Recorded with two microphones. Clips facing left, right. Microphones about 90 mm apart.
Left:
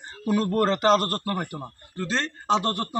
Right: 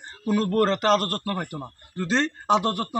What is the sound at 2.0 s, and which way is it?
Speech, 20° right (ahead or behind).